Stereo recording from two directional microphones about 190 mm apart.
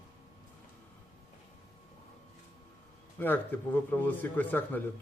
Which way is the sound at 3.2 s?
10° left (ahead or behind).